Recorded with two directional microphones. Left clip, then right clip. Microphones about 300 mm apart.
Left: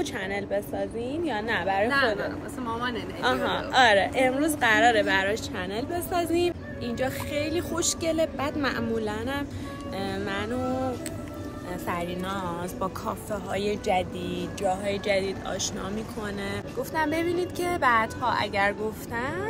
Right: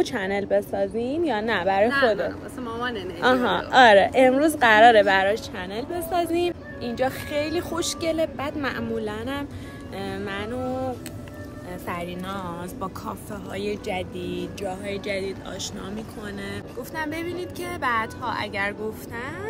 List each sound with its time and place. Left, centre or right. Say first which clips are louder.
0.0 s a woman's voice: right 5 dB; right
2.6 s speech: right 1 dB; centre
3.2 s a woman's voice: right 5 dB; right
5.3 s a woman's voice: right 2 dB; centre
11.9 s speech: even; centre